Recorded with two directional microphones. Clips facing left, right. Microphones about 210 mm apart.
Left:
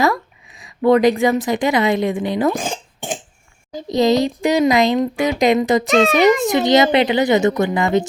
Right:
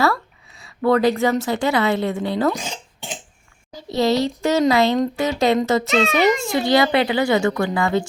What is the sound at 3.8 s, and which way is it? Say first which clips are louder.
A woman's voice: left 3 dB; 15° left (ahead or behind).